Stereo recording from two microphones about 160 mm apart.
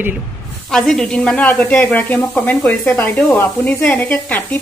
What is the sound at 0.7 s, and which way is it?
Speech, 5° left (ahead or behind).